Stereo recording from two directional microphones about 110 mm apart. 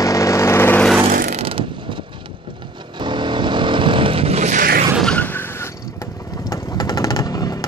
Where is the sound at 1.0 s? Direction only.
70° right (ahead or behind); by 2.0 s 55° right (ahead or behind).